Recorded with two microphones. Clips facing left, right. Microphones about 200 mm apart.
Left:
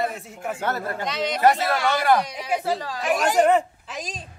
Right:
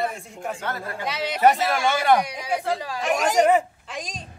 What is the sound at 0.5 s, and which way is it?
Speech, 45° left (ahead or behind).